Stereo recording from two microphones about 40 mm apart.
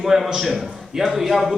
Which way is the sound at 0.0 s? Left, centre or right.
Centre.